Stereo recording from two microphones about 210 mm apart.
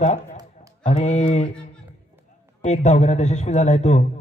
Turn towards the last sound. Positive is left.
turn(degrees=35)  # may be behind; listen again after turning